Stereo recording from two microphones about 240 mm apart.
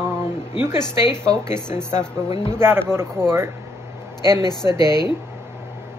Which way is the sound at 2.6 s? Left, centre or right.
Centre.